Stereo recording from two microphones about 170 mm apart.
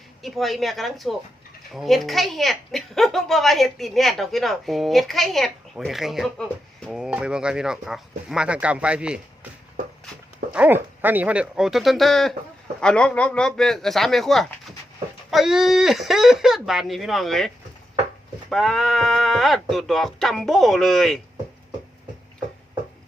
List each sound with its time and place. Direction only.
0.2 s a woman's voice: centre (ahead or behind)
10.5 s a woman's voice: 10° right (ahead or behind)
18.5 s a woman's voice: centre (ahead or behind)